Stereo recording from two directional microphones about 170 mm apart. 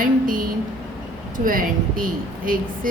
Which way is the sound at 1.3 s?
55° right (ahead or behind).